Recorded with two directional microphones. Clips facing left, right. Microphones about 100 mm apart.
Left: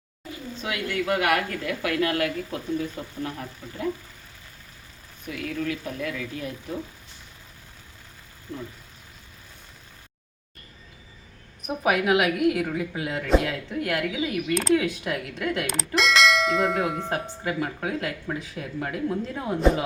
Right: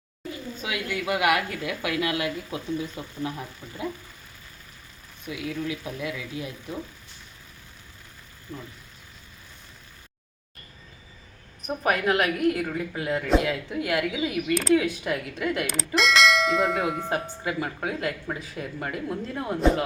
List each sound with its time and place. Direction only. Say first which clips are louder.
0.6 s a woman's voice: left 2 dB; 5° right (ahead or behind)
5.2 s a woman's voice: left 1 dB; 15° right (ahead or behind)
11.6 s a woman's voice: left 1 dB; 5° left (ahead or behind)